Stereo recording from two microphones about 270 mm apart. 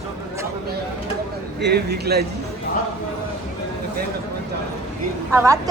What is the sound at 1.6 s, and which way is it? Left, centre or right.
Speech, right.